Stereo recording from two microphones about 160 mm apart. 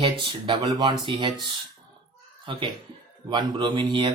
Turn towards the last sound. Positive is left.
turn(degrees=-30)  # may be behind; listen again after turning